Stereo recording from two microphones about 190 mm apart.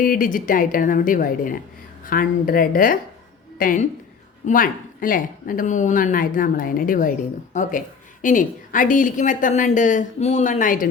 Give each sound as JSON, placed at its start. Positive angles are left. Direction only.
{"t": 0.0, "sound": "speech", "side_deg": 45}